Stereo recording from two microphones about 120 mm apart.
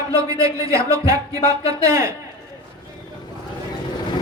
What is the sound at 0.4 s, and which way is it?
A woman's voice, 25° right (ahead or behind).